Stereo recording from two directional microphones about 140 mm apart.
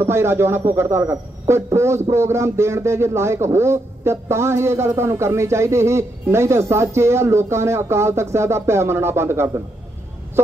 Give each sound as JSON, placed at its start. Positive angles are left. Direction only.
{"t": 0.0, "sound": "speech", "side_deg": -20}